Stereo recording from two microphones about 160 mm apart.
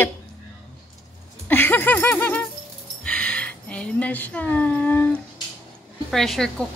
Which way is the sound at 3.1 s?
5° left (ahead or behind).